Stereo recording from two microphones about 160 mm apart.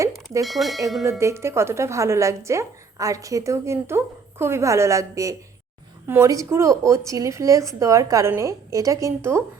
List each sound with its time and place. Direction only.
0.4 s speech: centre (ahead or behind)
1.2 s a woman's voice: 15° right (ahead or behind)